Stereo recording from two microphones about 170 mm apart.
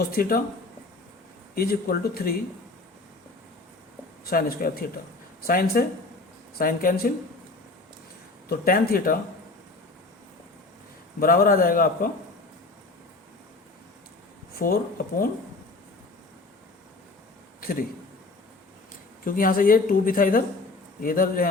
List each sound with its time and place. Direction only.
0.0 s speech: 60° left (ahead or behind)
1.5 s speech: 60° left (ahead or behind)
4.3 s speech: 60° left (ahead or behind)
8.4 s speech: 60° left (ahead or behind)
11.2 s speech: 60° left (ahead or behind)
14.6 s speech: 55° left (ahead or behind)
17.6 s a man's voice: 60° left (ahead or behind)
19.2 s speech: 55° left (ahead or behind)